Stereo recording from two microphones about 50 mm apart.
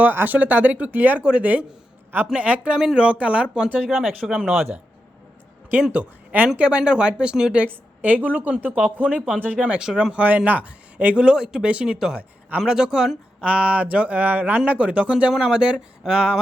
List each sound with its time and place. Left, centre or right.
0.0 s speech: right
1.2 s speech: right
2.7 s speech: centre
3.0 s speech: right
3.8 s speech: centre
5.9 s speech: right
7.6 s a woman's voice: right
10.2 s speech: right; by 16.4 s centre